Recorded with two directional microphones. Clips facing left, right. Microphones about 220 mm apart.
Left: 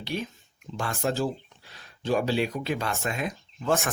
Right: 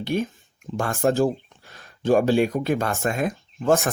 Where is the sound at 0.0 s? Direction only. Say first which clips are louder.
Right 8 dB; 50° right (ahead or behind).